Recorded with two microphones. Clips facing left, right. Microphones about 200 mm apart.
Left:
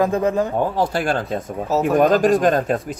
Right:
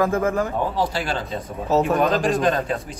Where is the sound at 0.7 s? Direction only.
50° left (ahead or behind).